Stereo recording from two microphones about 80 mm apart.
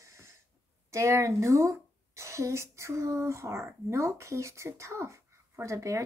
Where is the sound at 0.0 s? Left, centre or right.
Right.